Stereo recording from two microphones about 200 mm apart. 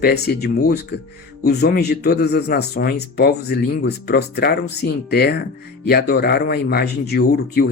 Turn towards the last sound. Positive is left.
turn(degrees=55)  # may be behind; listen again after turning